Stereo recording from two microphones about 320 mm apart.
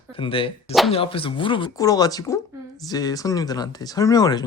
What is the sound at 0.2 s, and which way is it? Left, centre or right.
Speech, centre.